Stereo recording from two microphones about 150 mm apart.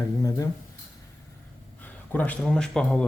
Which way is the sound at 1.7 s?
10° left (ahead or behind).